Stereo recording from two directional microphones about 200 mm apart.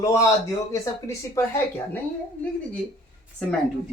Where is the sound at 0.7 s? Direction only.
15° left (ahead or behind).